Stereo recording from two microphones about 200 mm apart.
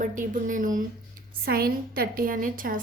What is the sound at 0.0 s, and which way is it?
A woman's voice, 40° right (ahead or behind).